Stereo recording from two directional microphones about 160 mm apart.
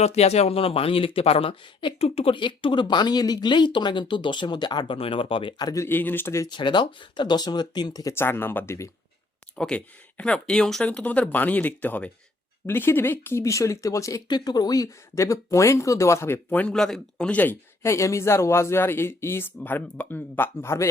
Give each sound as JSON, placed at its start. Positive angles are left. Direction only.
{"t": 0.0, "sound": "speech", "side_deg": 40}